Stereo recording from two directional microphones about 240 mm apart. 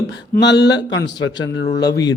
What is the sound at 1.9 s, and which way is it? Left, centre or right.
Speech, centre.